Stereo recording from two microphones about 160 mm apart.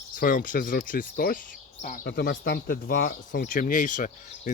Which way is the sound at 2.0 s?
75° left (ahead or behind).